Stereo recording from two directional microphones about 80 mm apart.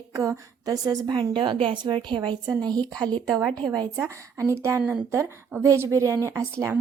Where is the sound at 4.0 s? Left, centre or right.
Right.